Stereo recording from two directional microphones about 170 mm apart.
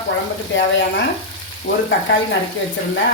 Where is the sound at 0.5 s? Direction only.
90° left.